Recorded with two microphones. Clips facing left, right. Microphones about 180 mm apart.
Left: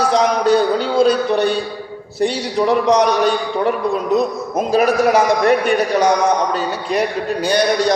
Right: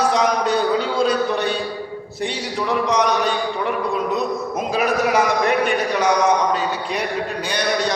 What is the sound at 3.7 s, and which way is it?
A man's voice, 40° left (ahead or behind).